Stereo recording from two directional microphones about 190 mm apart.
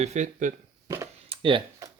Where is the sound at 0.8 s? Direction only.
15° right (ahead or behind).